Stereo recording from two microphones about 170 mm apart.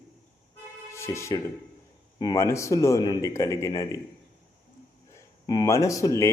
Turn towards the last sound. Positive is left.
turn(degrees=15)  # may be behind; listen again after turning